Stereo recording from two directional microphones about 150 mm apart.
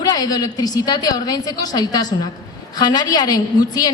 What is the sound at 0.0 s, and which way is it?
A woman's voice, 25° left (ahead or behind).